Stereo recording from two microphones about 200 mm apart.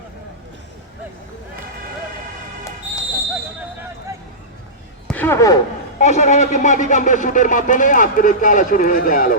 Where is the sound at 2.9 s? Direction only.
5° right (ahead or behind).